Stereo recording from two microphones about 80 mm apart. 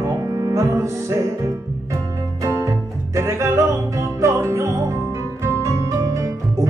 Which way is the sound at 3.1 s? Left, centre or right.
Right.